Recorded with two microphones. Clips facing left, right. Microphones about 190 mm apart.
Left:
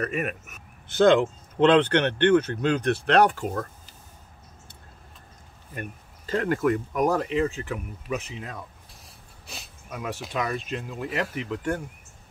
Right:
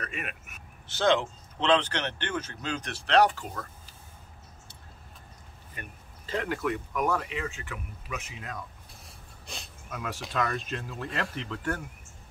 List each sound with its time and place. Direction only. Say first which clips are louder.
0.0 s speech: left 10 dB; 45° left (ahead or behind)
5.8 s speech: left 9 dB; 45° left (ahead or behind); by 8.5 s 30° left (ahead or behind)
9.8 s speech: left 3 dB; 15° left (ahead or behind)